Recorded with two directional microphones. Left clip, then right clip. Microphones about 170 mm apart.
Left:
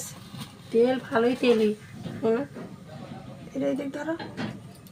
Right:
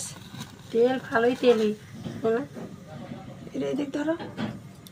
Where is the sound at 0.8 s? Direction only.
50° left (ahead or behind).